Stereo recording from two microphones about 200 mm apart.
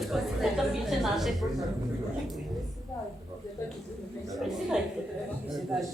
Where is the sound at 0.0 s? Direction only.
Centre (ahead or behind).